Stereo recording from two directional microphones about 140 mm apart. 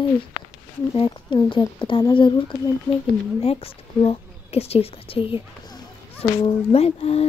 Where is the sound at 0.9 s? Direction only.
35° left (ahead or behind).